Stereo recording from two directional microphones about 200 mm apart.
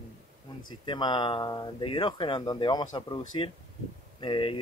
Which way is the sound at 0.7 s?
20° left (ahead or behind).